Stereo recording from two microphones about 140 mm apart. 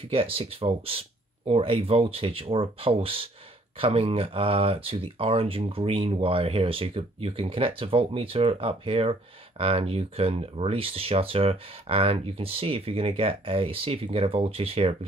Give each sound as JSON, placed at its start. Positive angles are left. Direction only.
{"t": 0.1, "sound": "speech", "side_deg": -40}